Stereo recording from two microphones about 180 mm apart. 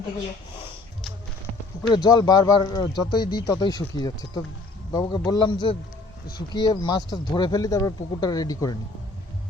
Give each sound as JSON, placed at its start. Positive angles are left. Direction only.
{"t": 1.9, "sound": "speech", "side_deg": 25}